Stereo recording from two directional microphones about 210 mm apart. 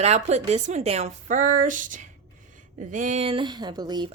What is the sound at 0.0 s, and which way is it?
Speech, 30° right (ahead or behind).